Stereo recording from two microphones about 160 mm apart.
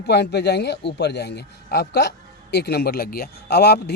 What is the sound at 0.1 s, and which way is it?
A man's voice, 90° left.